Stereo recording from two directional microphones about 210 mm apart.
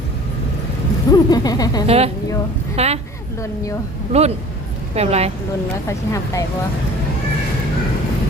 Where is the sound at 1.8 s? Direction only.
30° right (ahead or behind).